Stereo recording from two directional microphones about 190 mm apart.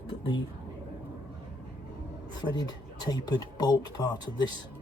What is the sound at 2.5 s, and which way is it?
Speech, 20° left (ahead or behind).